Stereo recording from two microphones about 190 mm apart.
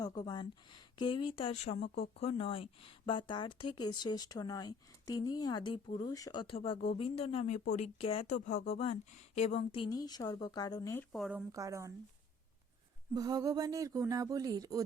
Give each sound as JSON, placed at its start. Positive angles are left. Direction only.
{"t": 0.2, "sound": "speech", "side_deg": 20}
{"t": 11.1, "sound": "speech", "side_deg": -5}
{"t": 11.5, "sound": "speech", "side_deg": -15}
{"t": 13.1, "sound": "speech", "side_deg": -20}